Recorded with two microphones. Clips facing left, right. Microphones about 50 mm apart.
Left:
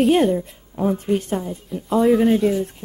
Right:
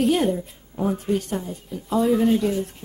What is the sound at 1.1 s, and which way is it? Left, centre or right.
A woman's voice, left.